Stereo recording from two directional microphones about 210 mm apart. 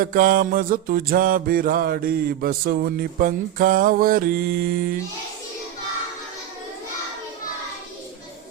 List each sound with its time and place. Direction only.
0.0 s mantra: 40° right (ahead or behind)